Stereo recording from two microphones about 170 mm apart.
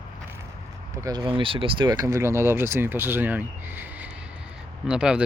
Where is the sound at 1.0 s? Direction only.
25° right (ahead or behind).